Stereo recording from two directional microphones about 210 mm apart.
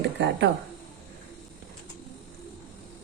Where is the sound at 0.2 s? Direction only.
55° right (ahead or behind).